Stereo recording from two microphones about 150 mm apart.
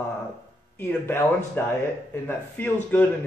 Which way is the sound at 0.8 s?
15° left (ahead or behind).